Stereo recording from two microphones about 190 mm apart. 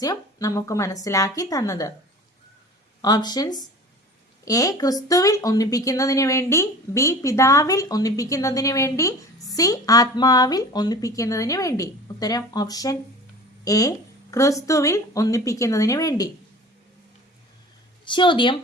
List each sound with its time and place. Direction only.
0.0 s speech: 20° left (ahead or behind)
3.0 s speech: 20° left (ahead or behind)
18.0 s speech: 25° left (ahead or behind)